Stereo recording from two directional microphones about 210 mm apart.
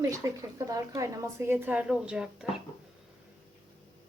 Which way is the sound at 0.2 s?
15° right (ahead or behind).